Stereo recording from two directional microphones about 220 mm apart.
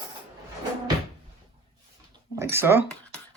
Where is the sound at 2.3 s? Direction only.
10° right (ahead or behind).